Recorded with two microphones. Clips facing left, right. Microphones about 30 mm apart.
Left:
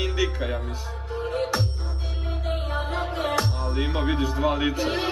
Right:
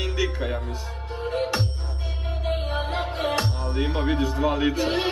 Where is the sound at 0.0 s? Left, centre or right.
Centre.